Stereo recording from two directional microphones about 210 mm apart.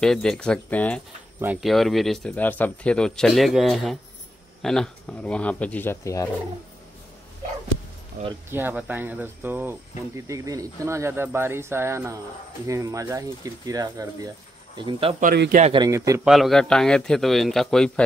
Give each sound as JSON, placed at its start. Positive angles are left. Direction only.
{"t": 0.0, "sound": "speech", "side_deg": 0}
{"t": 1.4, "sound": "speech", "side_deg": -5}
{"t": 8.5, "sound": "speech", "side_deg": -10}
{"t": 15.2, "sound": "speech", "side_deg": -45}
{"t": 15.6, "sound": "speech", "side_deg": -20}
{"t": 16.3, "sound": "speech", "side_deg": 0}